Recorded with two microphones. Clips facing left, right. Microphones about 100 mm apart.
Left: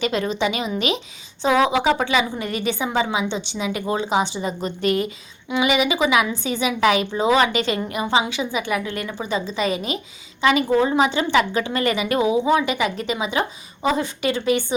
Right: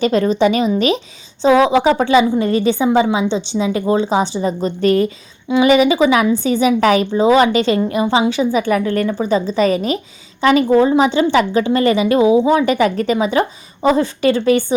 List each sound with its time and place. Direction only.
0.0 s a woman's voice: 40° right (ahead or behind)
12.6 s a woman's voice: 45° right (ahead or behind)